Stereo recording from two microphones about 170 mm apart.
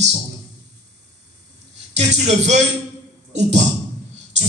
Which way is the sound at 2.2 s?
40° right (ahead or behind).